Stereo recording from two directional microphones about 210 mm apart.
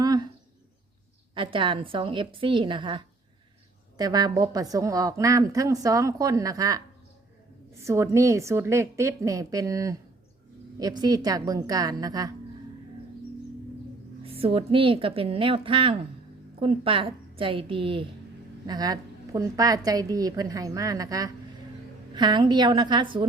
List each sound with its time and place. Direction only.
0.0 s bird: 20° right (ahead or behind)
1.4 s a woman's voice: 25° right (ahead or behind)
7.9 s a woman's voice: 15° right (ahead or behind)
14.3 s a woman's voice: 25° right (ahead or behind)